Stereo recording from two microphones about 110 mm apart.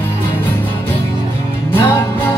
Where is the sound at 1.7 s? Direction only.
20° left (ahead or behind).